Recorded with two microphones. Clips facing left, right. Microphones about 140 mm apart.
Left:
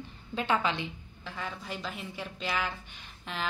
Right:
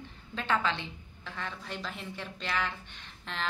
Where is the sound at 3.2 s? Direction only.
5° left (ahead or behind).